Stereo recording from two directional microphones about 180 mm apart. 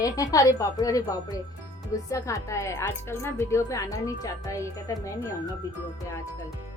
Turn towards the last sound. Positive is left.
turn(degrees=15)  # may be behind; listen again after turning